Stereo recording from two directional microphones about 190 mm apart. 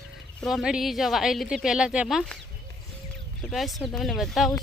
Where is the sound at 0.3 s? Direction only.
Centre (ahead or behind).